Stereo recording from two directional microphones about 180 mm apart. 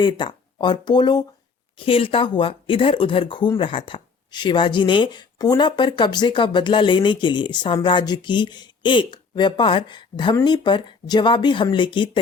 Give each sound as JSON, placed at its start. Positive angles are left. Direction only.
{"t": 0.0, "sound": "speech", "side_deg": 25}